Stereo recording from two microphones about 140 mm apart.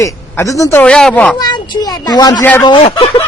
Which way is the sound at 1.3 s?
30° left (ahead or behind).